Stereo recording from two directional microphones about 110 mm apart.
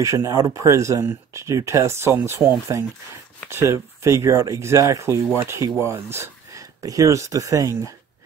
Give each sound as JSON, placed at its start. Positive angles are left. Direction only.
{"t": 0.0, "sound": "speech", "side_deg": -30}